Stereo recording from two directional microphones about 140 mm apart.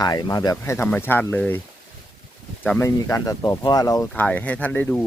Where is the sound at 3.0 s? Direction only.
25° left (ahead or behind).